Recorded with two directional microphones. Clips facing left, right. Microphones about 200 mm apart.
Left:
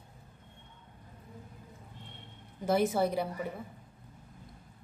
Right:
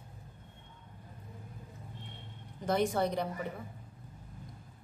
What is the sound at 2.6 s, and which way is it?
Speech, 5° left (ahead or behind).